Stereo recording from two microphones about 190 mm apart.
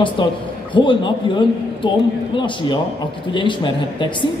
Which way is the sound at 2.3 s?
25° left (ahead or behind).